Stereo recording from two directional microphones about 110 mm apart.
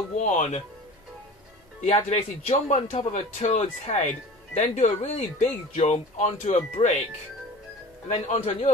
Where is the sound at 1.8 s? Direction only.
90° left.